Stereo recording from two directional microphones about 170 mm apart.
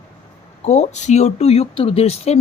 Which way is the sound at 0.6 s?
40° left (ahead or behind).